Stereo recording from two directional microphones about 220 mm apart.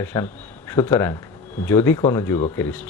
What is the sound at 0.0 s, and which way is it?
Speech, 10° left (ahead or behind).